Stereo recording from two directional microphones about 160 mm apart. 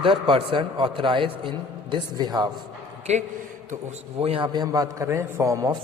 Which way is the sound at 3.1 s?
45° right (ahead or behind).